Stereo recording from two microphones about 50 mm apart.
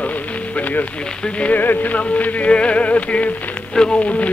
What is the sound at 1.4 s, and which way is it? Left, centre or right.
Speech, left.